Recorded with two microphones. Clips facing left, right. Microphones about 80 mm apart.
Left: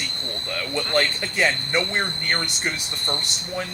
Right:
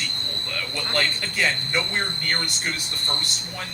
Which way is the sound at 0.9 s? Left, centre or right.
Left.